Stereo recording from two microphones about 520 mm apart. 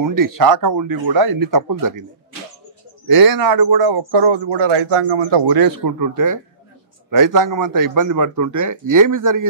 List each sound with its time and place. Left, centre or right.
0.0 s speech: right
3.1 s speech: right